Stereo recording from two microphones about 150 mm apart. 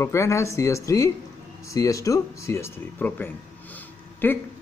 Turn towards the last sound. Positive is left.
turn(degrees=15)  # may be behind; listen again after turning